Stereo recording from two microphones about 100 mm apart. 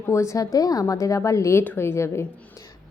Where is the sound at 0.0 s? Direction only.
30° left (ahead or behind).